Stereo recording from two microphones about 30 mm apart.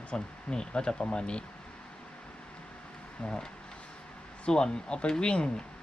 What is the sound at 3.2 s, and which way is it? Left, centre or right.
Speech, left.